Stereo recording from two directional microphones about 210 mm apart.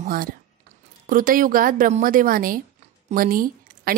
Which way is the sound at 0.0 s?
45° right (ahead or behind).